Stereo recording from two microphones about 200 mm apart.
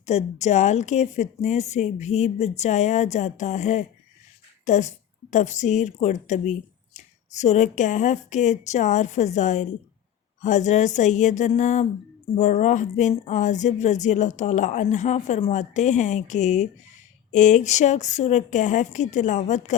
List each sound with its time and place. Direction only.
0.0 s a woman's voice: 35° left (ahead or behind)